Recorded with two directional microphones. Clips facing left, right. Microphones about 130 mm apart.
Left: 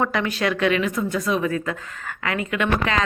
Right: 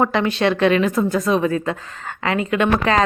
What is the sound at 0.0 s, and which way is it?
A woman's voice, 25° right (ahead or behind).